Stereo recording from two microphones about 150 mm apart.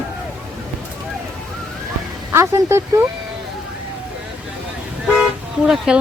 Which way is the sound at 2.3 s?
20° right (ahead or behind).